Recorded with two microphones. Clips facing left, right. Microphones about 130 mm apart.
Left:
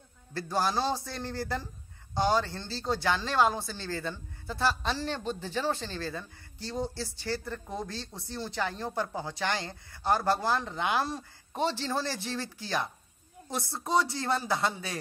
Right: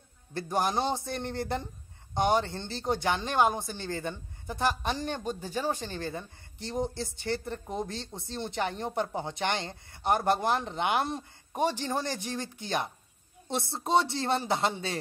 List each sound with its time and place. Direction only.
0.3 s speech: 20° right (ahead or behind)